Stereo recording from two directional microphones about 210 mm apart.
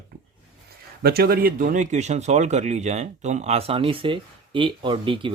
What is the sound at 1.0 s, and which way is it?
Speech, 45° right (ahead or behind).